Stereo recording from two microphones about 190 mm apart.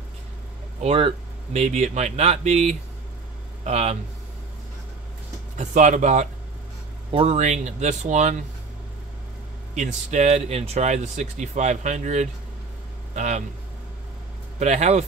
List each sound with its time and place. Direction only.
0.7 s speech: 30° right (ahead or behind)
5.6 s speech: 40° right (ahead or behind)
9.8 s a man's voice: 35° right (ahead or behind)
14.6 s speech: 35° right (ahead or behind)